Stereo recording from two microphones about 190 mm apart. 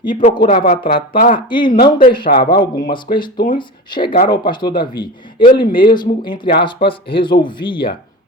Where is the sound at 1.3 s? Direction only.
25° left (ahead or behind).